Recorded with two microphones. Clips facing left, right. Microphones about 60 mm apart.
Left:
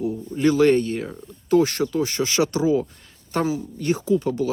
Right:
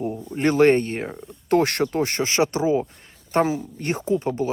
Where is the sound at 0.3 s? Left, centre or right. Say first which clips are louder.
Even; right.